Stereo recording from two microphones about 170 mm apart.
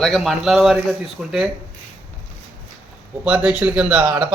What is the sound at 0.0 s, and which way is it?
A man's voice, centre (ahead or behind).